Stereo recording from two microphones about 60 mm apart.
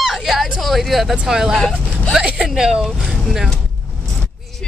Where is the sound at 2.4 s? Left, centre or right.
Centre.